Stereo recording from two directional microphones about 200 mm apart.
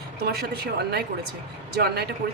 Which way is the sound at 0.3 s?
55° right (ahead or behind).